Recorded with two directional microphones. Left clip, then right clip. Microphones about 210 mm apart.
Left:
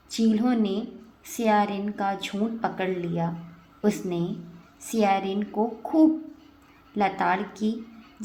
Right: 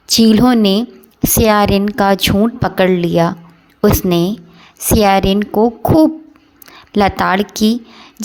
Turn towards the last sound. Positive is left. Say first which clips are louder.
# right 11 dB
turn(degrees=-40)  # may be behind; listen again after turning